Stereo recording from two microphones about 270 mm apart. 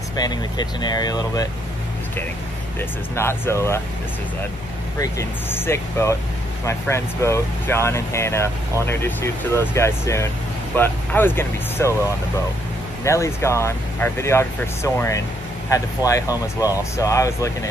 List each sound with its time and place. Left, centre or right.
0.1 s speech: centre
2.8 s speech: centre
4.9 s speech: centre
13.0 s speech: centre